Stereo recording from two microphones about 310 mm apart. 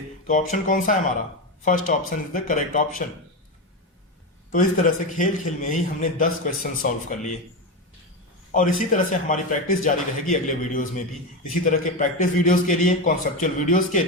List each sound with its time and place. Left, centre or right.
0.3 s a man's voice: left
4.5 s a man's voice: left
8.5 s a man's voice: left